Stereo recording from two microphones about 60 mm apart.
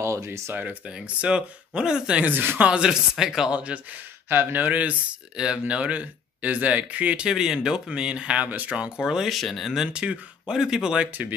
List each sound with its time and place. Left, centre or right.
0.0 s speech: right
0.5 s speech: right
1.2 s speech: centre
2.2 s speech: right
2.7 s speech: centre
3.5 s speech: right
4.3 s speech: right
7.2 s speech: centre
9.9 s speech: centre